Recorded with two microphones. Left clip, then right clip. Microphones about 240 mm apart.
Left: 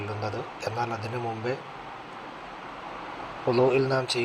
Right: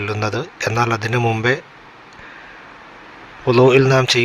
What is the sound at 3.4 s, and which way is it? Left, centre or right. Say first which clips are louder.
Speech: right 10 dB; right.